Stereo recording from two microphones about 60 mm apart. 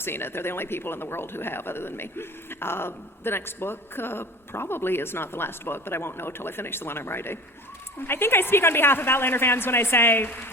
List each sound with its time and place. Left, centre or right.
0.0 s speech: left